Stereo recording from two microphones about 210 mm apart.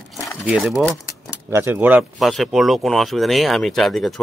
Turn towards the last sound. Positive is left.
turn(degrees=0)  # may be behind; listen again after turning